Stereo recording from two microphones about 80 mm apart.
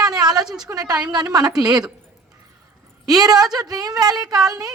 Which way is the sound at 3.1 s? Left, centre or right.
Right.